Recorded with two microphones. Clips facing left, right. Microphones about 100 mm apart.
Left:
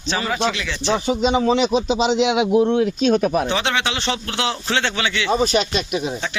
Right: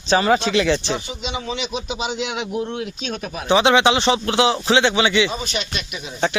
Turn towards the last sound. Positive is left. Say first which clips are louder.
# left 8 dB
turn(degrees=40)  # may be behind; listen again after turning